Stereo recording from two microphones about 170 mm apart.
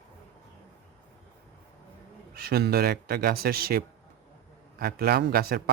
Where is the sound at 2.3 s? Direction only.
65° right (ahead or behind).